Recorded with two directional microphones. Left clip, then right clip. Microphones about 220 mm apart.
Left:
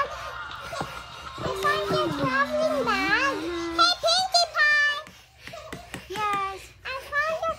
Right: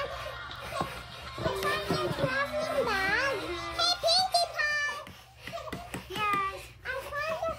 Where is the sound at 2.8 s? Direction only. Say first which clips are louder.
Left 5 dB; 25° left (ahead or behind).